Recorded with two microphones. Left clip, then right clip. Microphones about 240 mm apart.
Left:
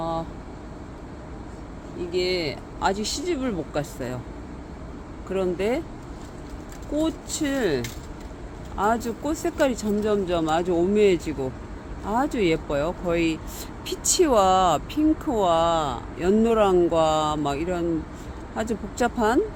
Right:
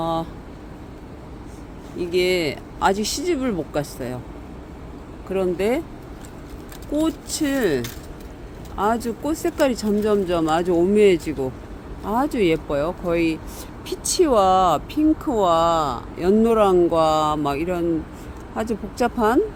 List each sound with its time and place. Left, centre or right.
0.0 s vehicle: right
2.0 s speech: right; by 4.2 s centre
5.3 s speech: centre
7.0 s speech: centre
18.9 s speech: centre